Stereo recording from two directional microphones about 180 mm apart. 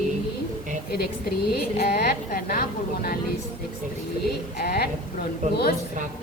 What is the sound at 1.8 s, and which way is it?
Speech, 60° left (ahead or behind).